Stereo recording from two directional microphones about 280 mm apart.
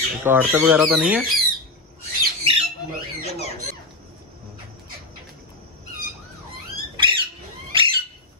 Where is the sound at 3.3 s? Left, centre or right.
Left.